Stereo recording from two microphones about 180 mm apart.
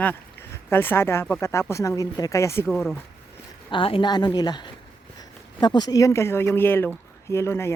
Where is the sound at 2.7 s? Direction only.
Centre (ahead or behind).